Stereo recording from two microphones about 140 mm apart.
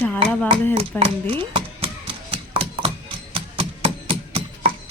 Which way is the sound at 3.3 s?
45° right (ahead or behind).